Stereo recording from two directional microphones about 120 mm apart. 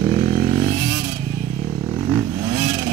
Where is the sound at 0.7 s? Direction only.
30° right (ahead or behind).